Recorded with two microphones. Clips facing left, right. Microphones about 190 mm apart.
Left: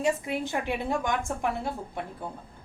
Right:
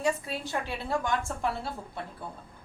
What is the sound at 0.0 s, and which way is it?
A woman's voice, 20° left (ahead or behind).